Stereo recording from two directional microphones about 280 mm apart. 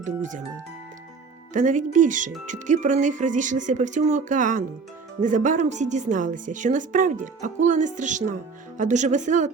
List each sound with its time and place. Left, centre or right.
0.0 s a woman's voice: right
1.5 s a woman's voice: right